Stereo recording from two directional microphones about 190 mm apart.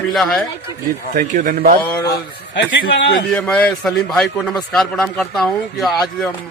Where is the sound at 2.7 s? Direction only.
65° left (ahead or behind).